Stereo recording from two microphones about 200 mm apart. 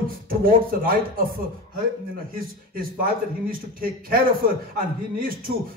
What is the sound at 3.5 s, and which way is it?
A man's voice, 45° right (ahead or behind).